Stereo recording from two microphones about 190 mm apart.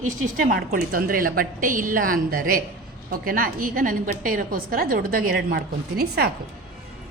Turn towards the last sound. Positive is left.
turn(degrees=-55)  # may be behind; listen again after turning